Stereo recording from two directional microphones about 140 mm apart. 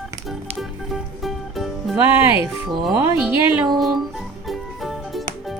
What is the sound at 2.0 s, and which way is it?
A child's voice, 15° right (ahead or behind).